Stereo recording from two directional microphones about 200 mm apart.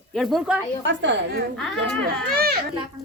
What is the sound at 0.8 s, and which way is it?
Speech, 65° right (ahead or behind).